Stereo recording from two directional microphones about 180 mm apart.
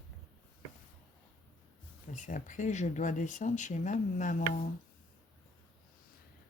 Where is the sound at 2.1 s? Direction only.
45° left (ahead or behind).